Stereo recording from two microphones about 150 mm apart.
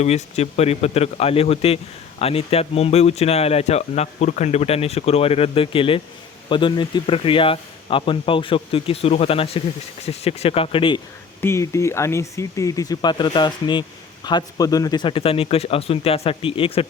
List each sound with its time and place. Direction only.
0.0 s speech: 45° left (ahead or behind)
11.3 s speech: 15° left (ahead or behind); by 16.8 s 35° left (ahead or behind)